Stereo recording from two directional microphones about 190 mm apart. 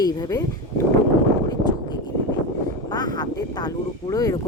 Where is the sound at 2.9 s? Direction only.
20° left (ahead or behind).